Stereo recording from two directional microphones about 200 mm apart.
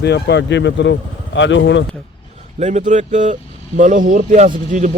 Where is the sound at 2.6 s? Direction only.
35° right (ahead or behind).